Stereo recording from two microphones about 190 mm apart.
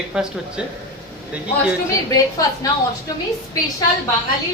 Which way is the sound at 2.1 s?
20° left (ahead or behind).